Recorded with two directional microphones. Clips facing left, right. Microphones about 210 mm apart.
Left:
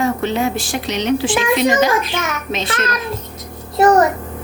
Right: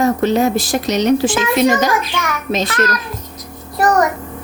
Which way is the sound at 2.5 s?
35° right (ahead or behind).